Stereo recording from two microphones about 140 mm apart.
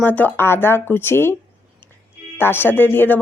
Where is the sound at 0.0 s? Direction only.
10° left (ahead or behind).